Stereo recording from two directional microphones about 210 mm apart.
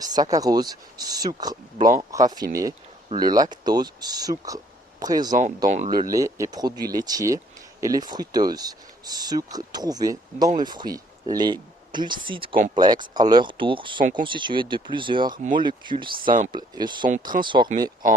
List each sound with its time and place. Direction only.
0.0 s speech: 20° right (ahead or behind)
16.1 s speech: 40° right (ahead or behind)
16.5 s speech: 20° right (ahead or behind)
18.0 s speech: 40° right (ahead or behind)